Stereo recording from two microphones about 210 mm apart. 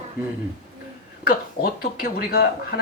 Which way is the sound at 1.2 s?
45° left (ahead or behind).